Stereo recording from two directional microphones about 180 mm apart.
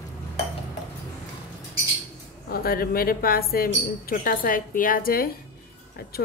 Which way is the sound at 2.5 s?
55° left (ahead or behind).